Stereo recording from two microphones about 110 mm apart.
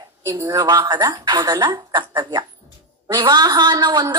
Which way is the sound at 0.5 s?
40° right (ahead or behind).